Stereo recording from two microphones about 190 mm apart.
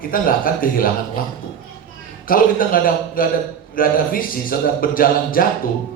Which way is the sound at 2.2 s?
50° left (ahead or behind).